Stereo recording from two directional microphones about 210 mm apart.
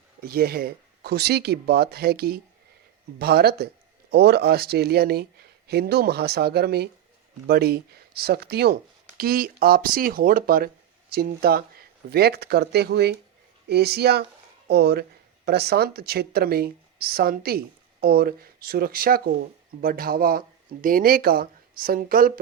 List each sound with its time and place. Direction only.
0.2 s speech: 45° right (ahead or behind)